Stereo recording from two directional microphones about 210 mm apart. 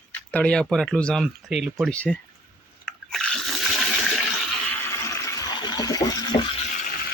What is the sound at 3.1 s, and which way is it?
Toilet flush, 5° left (ahead or behind).